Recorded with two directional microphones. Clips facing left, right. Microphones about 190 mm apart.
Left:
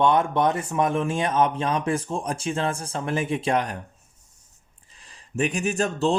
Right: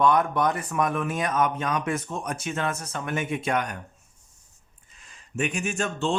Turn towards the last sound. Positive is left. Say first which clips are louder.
# left 4 dB
turn(degrees=35)  # may be behind; listen again after turning